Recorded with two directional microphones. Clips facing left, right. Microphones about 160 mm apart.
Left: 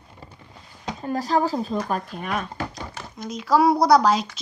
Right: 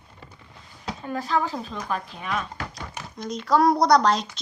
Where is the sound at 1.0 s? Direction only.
40° left (ahead or behind).